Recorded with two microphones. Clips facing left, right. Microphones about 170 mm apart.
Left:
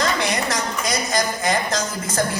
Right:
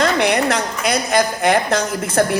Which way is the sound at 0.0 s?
60° right (ahead or behind).